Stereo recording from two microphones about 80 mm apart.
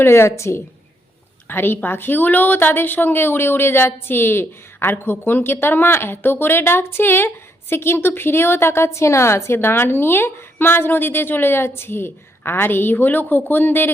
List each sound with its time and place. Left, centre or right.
0.0 s a woman's voice: left